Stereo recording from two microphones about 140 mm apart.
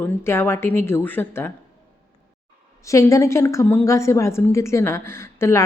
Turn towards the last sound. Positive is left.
turn(degrees=20)  # may be behind; listen again after turning